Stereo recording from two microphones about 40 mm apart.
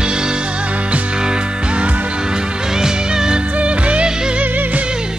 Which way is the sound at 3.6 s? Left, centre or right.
Right.